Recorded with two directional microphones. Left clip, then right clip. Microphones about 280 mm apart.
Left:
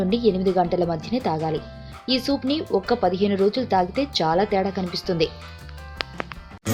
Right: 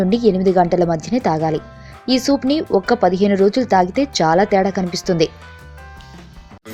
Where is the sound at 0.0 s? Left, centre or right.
Right.